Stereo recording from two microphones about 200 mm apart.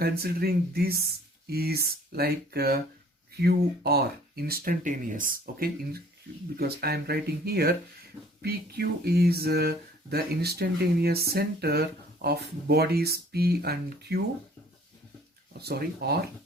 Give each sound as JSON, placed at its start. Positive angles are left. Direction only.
{"t": 0.0, "sound": "speech", "side_deg": -50}
{"t": 15.6, "sound": "speech", "side_deg": -50}